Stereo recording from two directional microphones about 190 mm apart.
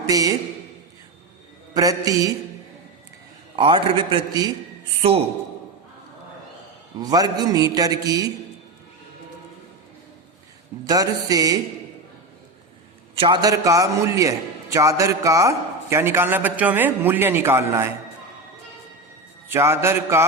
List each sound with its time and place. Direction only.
0.0 s a man's voice: 20° right (ahead or behind)
1.7 s a man's voice: 20° right (ahead or behind)
3.5 s a man's voice: 25° right (ahead or behind)
4.9 s a man's voice: 30° right (ahead or behind)
7.0 s a man's voice: 20° right (ahead or behind)
10.8 s a man's voice: 20° right (ahead or behind)
13.1 s a man's voice: 25° right (ahead or behind)
19.5 s a man's voice: 15° right (ahead or behind)